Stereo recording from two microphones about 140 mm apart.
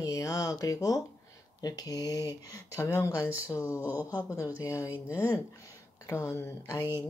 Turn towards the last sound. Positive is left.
turn(degrees=-15)  # may be behind; listen again after turning